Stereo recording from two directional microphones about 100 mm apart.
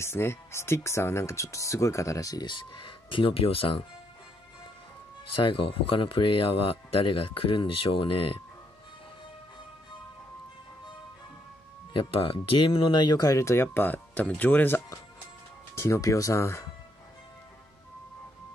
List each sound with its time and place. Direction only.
0.0 s speech: 25° left (ahead or behind)
2.4 s speech: 50° left (ahead or behind); by 3.7 s 70° left (ahead or behind)
5.3 s speech: 60° left (ahead or behind)
11.9 s speech: 60° left (ahead or behind); by 14.8 s 20° left (ahead or behind)
15.7 s speech: 30° left (ahead or behind)